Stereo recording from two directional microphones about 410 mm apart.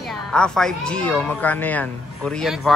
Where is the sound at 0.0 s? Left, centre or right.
Centre.